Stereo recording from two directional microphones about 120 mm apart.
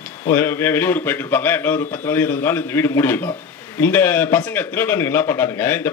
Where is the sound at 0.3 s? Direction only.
20° left (ahead or behind).